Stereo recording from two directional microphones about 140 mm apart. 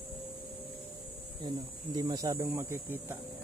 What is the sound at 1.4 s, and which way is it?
Speech, 30° right (ahead or behind).